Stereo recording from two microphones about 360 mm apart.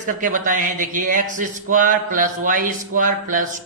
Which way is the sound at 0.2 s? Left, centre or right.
Right.